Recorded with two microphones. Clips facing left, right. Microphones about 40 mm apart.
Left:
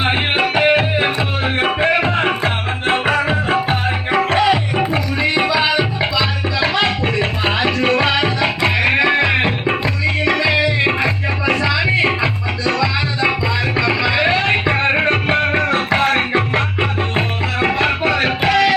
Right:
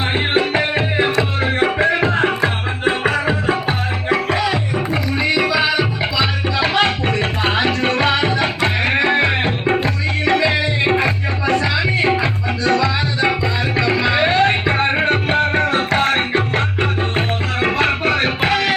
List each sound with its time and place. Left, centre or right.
0.0 s music: left
5.2 s music: left
5.6 s music: left
12.8 s music: right
14.1 s music: right
14.8 s music: centre